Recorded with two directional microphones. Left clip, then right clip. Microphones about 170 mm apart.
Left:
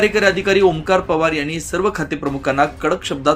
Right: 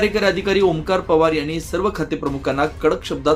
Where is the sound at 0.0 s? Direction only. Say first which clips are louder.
Left 3 dB; 10° left (ahead or behind).